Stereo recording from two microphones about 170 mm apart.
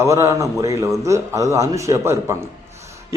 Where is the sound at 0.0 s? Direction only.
15° right (ahead or behind).